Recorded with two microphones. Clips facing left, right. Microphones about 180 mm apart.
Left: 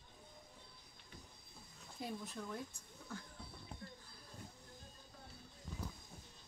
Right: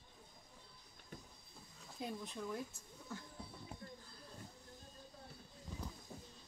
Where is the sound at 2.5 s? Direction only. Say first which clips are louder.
Right 2 dB; 5° right (ahead or behind).